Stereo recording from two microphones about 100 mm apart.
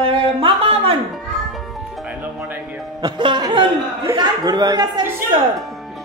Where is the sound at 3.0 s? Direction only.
45° right (ahead or behind).